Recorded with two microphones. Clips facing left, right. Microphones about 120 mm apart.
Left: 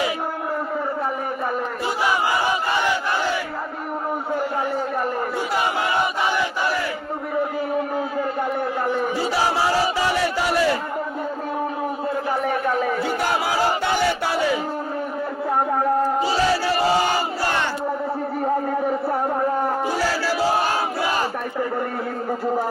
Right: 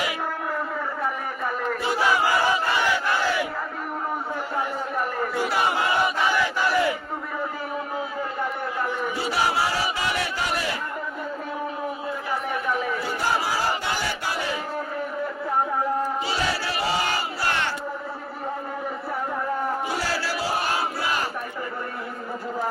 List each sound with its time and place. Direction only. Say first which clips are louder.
2.0 s battle cry: even; 15° left (ahead or behind)
6.3 s crowd: left 1 dB; 20° left (ahead or behind)
12.6 s chatter: left 5 dB; 45° left (ahead or behind)
16.0 s battle cry: left 7 dB; 35° left (ahead or behind)